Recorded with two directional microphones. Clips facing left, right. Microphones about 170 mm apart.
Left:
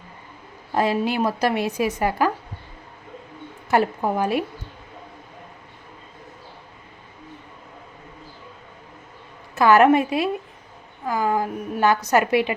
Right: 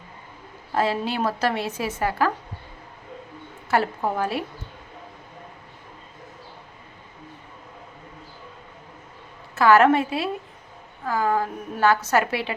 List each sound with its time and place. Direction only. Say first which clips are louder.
0.7 s a woman's voice: left 3 dB; 15° left (ahead or behind)
3.7 s a woman's voice: left 3 dB; 15° left (ahead or behind)
9.6 s a woman's voice: left 2 dB; 15° left (ahead or behind)